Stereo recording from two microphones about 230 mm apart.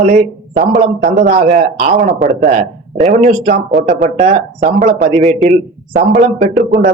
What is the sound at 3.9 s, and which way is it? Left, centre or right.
Speech, right.